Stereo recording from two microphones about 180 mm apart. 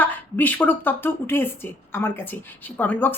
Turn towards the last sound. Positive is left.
turn(degrees=10)  # may be behind; listen again after turning